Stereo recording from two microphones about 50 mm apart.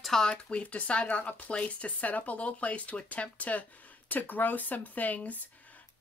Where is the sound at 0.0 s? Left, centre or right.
Centre.